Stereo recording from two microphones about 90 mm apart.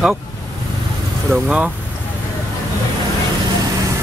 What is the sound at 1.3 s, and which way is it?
Speech, 15° right (ahead or behind).